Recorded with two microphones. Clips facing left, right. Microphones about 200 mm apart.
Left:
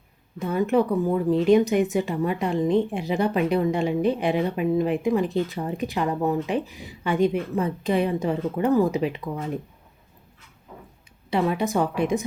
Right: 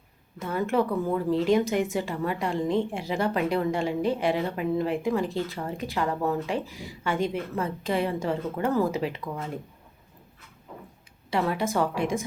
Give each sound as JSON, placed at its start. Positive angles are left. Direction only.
{"t": 0.3, "sound": "speech", "side_deg": 20}
{"t": 11.3, "sound": "speech", "side_deg": 20}